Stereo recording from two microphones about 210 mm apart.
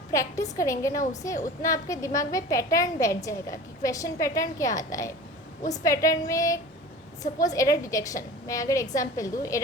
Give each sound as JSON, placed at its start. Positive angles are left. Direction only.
{"t": 0.1, "sound": "a woman's voice", "side_deg": 15}